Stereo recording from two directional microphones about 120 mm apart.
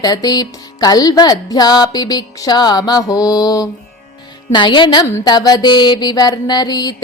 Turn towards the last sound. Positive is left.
turn(degrees=35)  # may be behind; listen again after turning